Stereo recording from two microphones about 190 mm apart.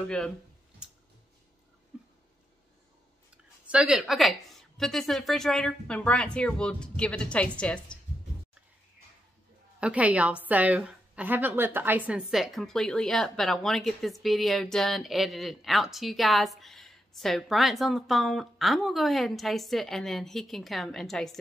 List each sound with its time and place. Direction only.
0.8 s tick-tock: 5° right (ahead or behind)
3.6 s a woman's voice: 5° right (ahead or behind)
9.8 s a woman's voice: 5° right (ahead or behind)